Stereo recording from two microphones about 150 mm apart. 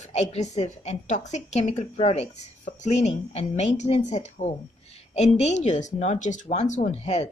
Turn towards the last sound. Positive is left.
turn(degrees=45)  # may be behind; listen again after turning